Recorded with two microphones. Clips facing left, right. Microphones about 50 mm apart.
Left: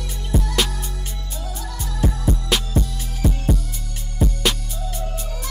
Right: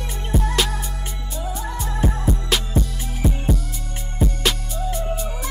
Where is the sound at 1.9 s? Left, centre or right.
Right.